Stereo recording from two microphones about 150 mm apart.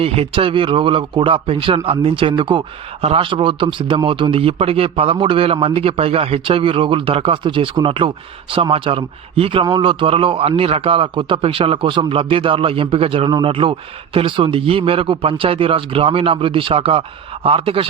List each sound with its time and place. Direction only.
0.0 s a man's voice: 40° right (ahead or behind)